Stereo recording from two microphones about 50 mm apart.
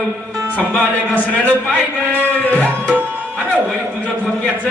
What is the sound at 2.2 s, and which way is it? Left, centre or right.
Speech, left.